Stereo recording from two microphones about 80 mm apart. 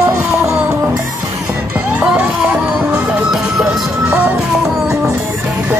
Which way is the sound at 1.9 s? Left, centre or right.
Centre.